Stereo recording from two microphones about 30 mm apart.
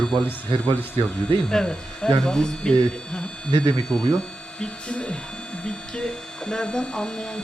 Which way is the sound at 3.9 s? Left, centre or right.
Left.